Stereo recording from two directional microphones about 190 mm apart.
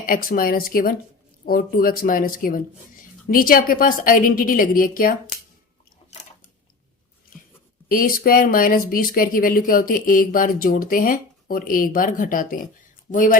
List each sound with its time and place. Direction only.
0.0 s speech: 50° left (ahead or behind)
7.9 s speech: 50° left (ahead or behind)